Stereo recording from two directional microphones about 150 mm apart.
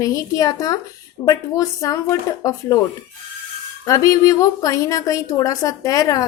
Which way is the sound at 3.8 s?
20° left (ahead or behind).